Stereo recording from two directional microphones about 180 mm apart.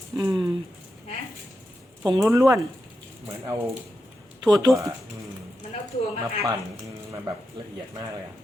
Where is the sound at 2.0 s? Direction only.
20° right (ahead or behind).